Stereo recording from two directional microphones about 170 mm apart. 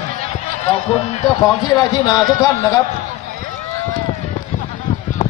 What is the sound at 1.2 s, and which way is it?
A man's voice, 25° left (ahead or behind).